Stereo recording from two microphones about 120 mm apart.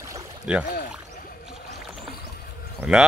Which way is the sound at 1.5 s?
5° right (ahead or behind).